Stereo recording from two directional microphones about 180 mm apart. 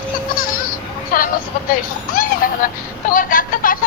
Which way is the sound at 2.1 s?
50° left (ahead or behind).